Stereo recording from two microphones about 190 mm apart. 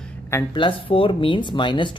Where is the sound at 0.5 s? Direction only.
25° left (ahead or behind).